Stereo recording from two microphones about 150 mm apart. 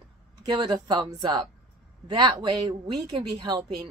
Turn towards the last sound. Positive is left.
turn(degrees=-30)  # may be behind; listen again after turning